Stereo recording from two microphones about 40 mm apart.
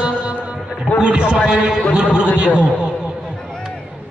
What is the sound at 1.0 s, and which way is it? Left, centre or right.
A man's voice, right.